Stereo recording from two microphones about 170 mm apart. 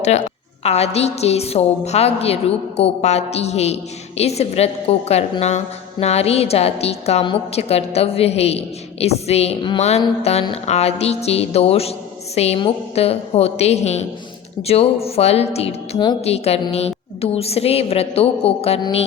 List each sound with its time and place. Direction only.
0.0 s a woman's voice: 40° left (ahead or behind)